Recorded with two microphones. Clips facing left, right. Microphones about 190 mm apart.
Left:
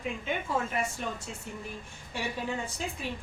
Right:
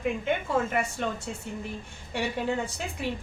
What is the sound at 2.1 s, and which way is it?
Speech, 65° right (ahead or behind).